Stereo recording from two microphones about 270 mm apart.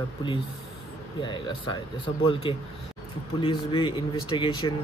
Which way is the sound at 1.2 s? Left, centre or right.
Centre.